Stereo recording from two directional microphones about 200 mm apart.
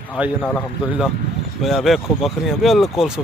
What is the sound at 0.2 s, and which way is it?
Speech, 5° right (ahead or behind).